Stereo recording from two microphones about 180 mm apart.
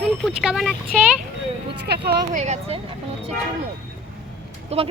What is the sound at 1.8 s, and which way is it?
Speech, 60° right (ahead or behind).